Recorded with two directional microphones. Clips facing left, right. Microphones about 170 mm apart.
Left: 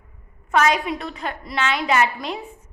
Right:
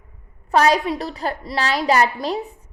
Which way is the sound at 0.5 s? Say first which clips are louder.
Right 3 dB; 35° right (ahead or behind).